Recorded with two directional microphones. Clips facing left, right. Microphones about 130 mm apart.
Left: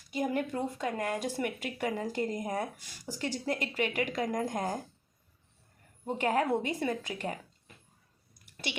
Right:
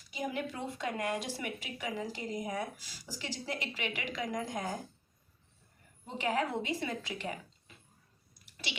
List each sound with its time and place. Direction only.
0.1 s speech: 50° left (ahead or behind)
6.1 s speech: 50° left (ahead or behind)
8.4 s a sound: 50° left (ahead or behind)